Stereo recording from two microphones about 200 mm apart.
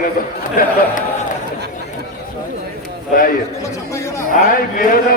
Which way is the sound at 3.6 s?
15° left (ahead or behind).